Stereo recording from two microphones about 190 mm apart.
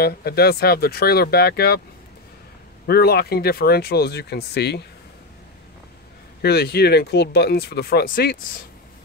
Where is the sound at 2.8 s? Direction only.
55° left (ahead or behind).